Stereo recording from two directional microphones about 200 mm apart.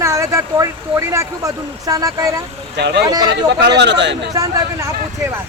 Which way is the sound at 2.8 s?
60° right (ahead or behind).